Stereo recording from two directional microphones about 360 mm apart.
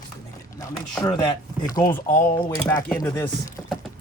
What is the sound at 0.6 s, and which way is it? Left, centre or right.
Speech, centre.